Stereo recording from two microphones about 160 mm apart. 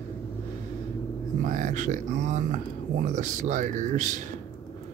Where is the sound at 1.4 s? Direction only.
50° right (ahead or behind).